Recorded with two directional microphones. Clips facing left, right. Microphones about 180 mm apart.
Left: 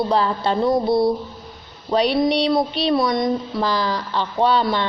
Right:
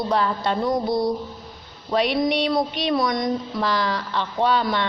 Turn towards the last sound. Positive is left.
turn(degrees=30)  # may be behind; listen again after turning